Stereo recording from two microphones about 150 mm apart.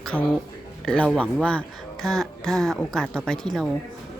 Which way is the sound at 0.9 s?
5° left (ahead or behind).